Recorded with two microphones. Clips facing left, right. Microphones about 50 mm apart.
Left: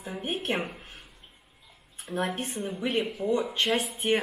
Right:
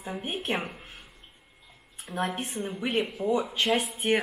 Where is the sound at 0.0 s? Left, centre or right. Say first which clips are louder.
Left 1 dB; centre.